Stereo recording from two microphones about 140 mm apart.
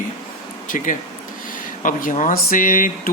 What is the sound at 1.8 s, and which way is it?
Speech, 70° left (ahead or behind).